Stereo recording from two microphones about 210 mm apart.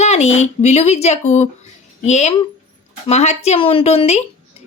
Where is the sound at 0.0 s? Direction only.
30° left (ahead or behind).